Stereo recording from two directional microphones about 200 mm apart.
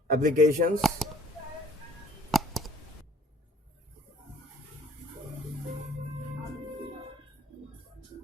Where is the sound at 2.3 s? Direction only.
Centre (ahead or behind).